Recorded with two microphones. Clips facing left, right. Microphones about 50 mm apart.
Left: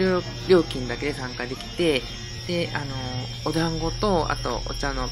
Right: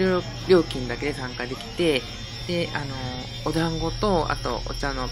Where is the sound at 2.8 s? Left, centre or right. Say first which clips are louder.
Even; left.